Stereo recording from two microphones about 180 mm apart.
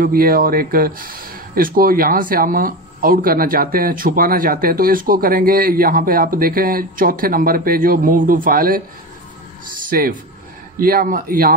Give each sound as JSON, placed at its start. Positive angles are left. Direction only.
{"t": 0.0, "sound": "speech", "side_deg": -55}
{"t": 9.8, "sound": "speech", "side_deg": -50}